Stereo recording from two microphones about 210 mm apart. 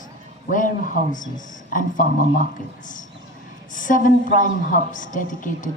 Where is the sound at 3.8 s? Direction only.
40° left (ahead or behind).